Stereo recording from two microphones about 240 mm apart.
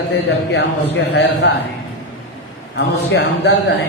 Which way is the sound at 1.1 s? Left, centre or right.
Left.